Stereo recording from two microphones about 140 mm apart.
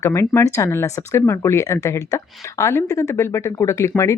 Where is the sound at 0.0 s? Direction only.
20° left (ahead or behind).